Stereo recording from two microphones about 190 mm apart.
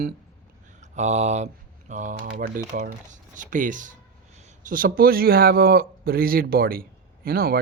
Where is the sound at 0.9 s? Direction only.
35° right (ahead or behind).